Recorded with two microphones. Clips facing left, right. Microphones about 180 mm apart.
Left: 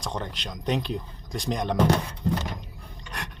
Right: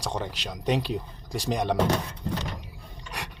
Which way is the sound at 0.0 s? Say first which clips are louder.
Right 1 dB; 10° right (ahead or behind).